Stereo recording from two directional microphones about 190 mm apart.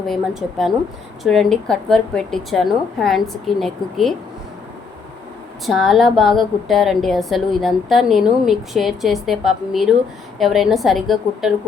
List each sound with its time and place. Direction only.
0.1 s a woman's voice: centre (ahead or behind)
5.6 s a woman's voice: centre (ahead or behind)